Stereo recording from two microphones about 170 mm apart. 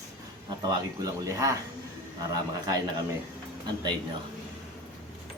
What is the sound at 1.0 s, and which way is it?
A man's voice, 20° right (ahead or behind).